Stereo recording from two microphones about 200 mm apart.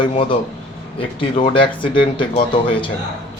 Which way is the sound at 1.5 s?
25° left (ahead or behind).